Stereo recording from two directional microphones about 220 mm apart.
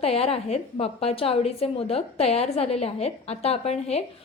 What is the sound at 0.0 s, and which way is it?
A woman's voice, 25° left (ahead or behind).